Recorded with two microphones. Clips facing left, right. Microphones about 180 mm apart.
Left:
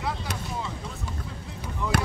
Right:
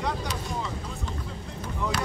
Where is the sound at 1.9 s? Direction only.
55° left (ahead or behind).